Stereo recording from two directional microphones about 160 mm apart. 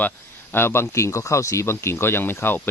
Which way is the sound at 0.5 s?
15° left (ahead or behind).